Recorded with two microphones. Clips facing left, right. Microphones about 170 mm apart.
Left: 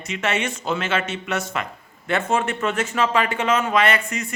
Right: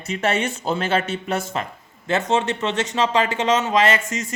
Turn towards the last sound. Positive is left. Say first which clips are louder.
# right 1 dB
turn(degrees=-25)  # may be behind; listen again after turning